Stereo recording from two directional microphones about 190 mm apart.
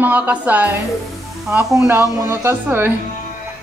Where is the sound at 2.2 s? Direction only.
15° right (ahead or behind).